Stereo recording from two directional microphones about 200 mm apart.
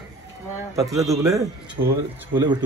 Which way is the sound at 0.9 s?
15° right (ahead or behind).